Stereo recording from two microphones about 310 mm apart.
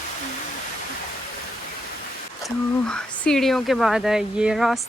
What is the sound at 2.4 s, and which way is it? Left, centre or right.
Speech, centre.